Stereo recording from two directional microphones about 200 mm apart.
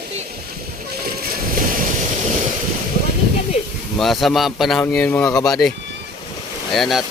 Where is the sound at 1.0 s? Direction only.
45° right (ahead or behind).